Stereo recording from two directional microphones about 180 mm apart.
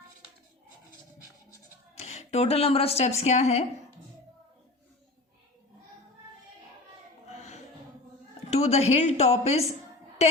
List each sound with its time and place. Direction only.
2.0 s speech: 40° left (ahead or behind)
7.3 s music: 40° left (ahead or behind)
8.4 s a woman's voice: 35° left (ahead or behind)
10.2 s a sound: 35° left (ahead or behind)